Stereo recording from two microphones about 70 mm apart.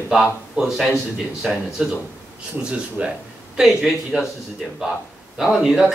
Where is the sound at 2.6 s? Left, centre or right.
Centre.